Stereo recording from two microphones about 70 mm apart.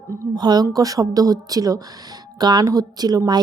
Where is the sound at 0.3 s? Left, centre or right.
Right.